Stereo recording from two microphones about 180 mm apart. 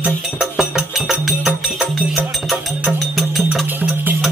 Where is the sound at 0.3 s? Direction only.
Centre (ahead or behind).